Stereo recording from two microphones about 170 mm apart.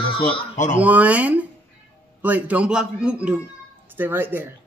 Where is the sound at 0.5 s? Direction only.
45° left (ahead or behind).